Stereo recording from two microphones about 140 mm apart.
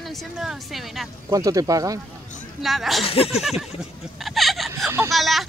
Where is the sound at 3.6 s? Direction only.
Centre (ahead or behind).